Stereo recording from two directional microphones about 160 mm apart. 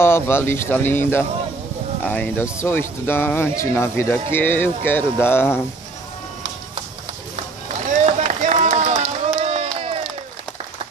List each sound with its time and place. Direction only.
0.0 s speech: 15° left (ahead or behind)
7.6 s run: 45° right (ahead or behind)